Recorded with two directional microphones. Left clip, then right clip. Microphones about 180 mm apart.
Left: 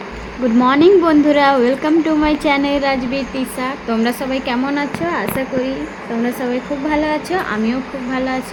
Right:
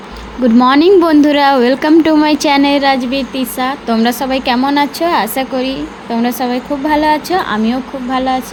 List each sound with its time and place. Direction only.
0.6 s a woman's voice: 20° right (ahead or behind); by 8.4 s 5° right (ahead or behind)